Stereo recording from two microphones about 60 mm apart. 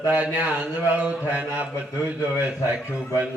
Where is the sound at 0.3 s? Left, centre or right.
Right.